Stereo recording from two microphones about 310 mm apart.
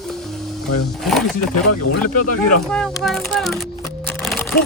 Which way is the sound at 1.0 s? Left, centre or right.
Centre.